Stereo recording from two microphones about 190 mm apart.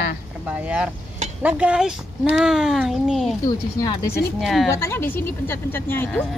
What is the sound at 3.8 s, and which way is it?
Speech, 15° left (ahead or behind).